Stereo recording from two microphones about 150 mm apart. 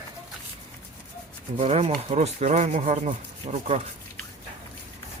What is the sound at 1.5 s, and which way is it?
Speech, 45° right (ahead or behind).